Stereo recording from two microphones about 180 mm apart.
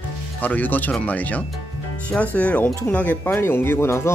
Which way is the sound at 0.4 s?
10° left (ahead or behind).